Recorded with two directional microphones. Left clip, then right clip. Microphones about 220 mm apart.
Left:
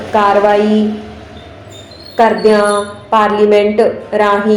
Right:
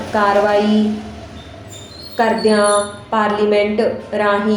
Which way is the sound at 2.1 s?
15° left (ahead or behind).